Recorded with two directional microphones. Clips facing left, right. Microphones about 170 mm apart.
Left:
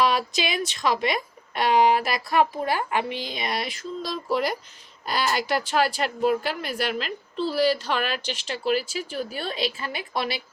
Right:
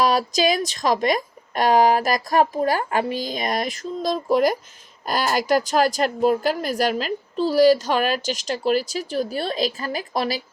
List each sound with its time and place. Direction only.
0.0 s a woman's voice: 40° right (ahead or behind)